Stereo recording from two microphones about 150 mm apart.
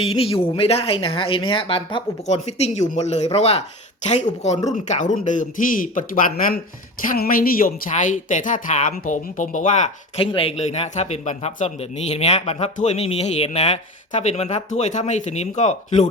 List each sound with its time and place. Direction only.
0.0 s a man's voice: 40° left (ahead or behind); by 9.8 s 55° left (ahead or behind)
10.2 s a man's voice: 40° left (ahead or behind)